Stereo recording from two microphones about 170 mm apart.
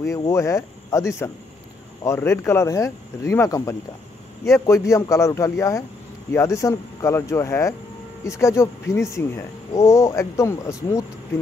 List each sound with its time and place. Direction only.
0.3 s speech: 20° left (ahead or behind)